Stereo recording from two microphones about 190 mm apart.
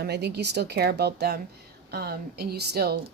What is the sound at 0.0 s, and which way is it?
Speech, 60° right (ahead or behind).